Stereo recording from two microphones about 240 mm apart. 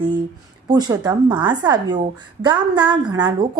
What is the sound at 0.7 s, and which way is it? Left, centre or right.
A woman's voice, centre.